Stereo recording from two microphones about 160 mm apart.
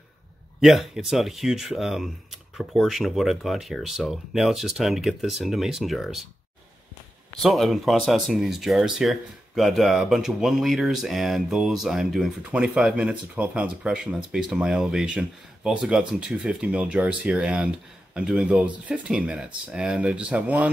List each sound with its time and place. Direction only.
0.6 s speech: centre (ahead or behind)
7.4 s speech: centre (ahead or behind)